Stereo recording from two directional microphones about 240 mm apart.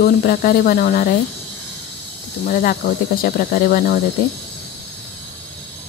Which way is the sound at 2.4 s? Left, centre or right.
Left.